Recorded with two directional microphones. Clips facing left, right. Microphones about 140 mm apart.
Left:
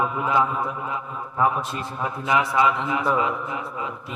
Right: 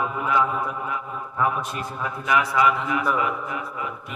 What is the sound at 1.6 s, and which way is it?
A man's voice, 25° left (ahead or behind).